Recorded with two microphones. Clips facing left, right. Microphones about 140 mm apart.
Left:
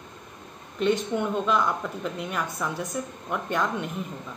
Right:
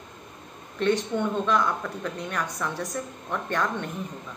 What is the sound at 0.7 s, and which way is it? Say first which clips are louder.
A woman's voice: even; 5° left (ahead or behind).